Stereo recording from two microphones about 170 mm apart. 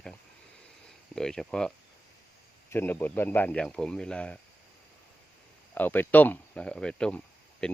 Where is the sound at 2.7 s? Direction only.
10° left (ahead or behind).